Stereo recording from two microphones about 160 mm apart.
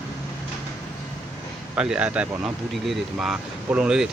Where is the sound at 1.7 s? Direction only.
5° right (ahead or behind).